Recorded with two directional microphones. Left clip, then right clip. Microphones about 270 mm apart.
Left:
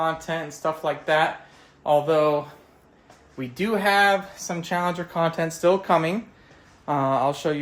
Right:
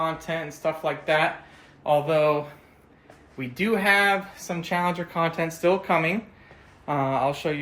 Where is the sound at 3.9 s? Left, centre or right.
Left.